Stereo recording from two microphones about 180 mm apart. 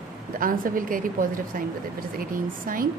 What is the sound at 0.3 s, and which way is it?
Speech, 50° right (ahead or behind).